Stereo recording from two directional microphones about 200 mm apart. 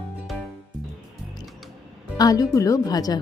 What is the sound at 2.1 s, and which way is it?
Speech, 20° left (ahead or behind).